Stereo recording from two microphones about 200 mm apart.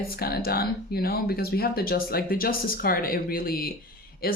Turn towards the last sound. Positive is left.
turn(degrees=50)  # may be behind; listen again after turning